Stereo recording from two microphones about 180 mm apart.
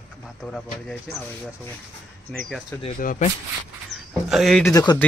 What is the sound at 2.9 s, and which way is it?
Speech, 50° left (ahead or behind).